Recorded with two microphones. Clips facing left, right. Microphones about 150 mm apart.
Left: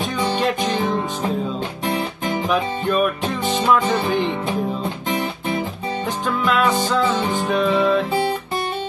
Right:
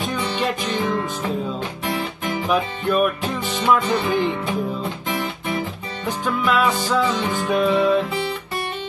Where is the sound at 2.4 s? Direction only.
5° right (ahead or behind).